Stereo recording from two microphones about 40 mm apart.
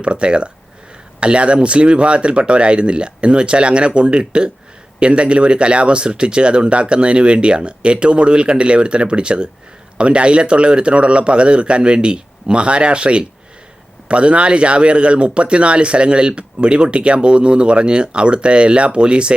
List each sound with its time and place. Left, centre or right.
0.0 s speech: right